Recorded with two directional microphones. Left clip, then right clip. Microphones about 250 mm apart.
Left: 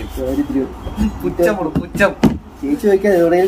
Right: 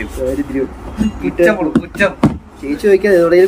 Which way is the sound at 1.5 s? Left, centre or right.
Left.